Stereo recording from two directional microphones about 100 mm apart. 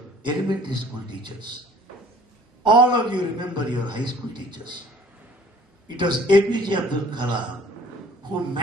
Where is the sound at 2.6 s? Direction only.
50° right (ahead or behind).